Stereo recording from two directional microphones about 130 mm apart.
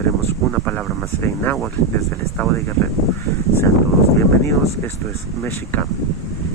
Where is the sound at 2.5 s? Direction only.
25° left (ahead or behind).